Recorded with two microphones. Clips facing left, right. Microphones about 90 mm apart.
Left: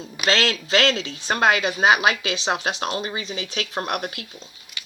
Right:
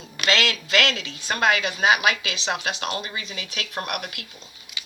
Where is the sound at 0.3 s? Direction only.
35° left (ahead or behind).